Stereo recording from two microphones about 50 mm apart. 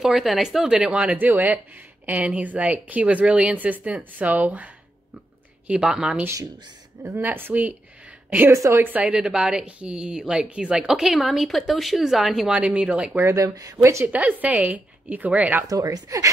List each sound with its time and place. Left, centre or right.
0.0 s speech: centre; by 1.1 s right
1.1 s speech: right
5.7 s speech: centre
7.0 s speech: right
7.2 s speech: right
8.5 s a woman's voice: right
8.7 s speech: right
9.0 s speech: centre
10.9 s speech: centre
12.5 s speech: right
13.1 s speech: right
13.7 s a woman's voice: right
14.0 s speech: right